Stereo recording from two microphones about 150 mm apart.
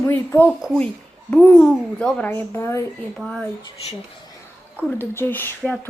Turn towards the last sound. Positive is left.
turn(degrees=10)  # may be behind; listen again after turning